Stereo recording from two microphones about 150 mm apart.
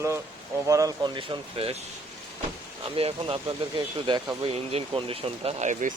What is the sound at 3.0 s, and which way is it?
Speech, 40° right (ahead or behind).